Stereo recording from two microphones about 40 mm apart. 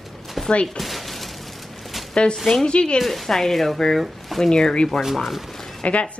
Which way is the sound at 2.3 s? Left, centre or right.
Centre.